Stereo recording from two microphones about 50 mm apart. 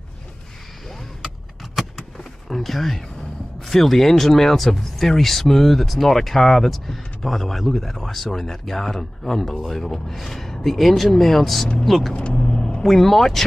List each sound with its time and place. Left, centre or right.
2.5 s speech: centre
12.1 s vehicle: centre
12.8 s speech: centre